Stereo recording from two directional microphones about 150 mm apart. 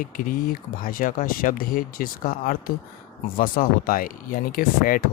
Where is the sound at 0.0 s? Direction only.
70° left (ahead or behind).